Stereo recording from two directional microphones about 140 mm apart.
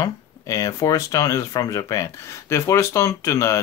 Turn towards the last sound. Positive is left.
turn(degrees=20)  # may be behind; listen again after turning